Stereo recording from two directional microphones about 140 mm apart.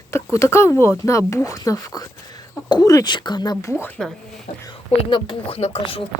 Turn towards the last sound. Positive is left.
turn(degrees=45)  # may be behind; listen again after turning